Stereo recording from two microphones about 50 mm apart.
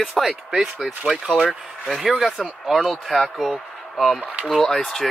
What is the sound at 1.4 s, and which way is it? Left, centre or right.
Speech, centre.